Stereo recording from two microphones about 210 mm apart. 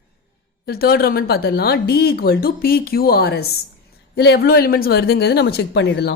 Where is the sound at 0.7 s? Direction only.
45° left (ahead or behind).